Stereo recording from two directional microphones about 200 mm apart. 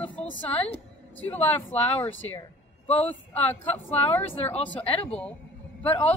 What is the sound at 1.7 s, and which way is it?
Speech, 30° left (ahead or behind).